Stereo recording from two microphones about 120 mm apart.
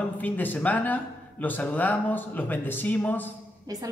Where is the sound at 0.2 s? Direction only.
15° left (ahead or behind).